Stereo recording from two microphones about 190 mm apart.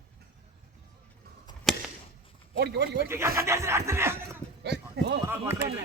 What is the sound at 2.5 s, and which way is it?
Speech, 60° right (ahead or behind).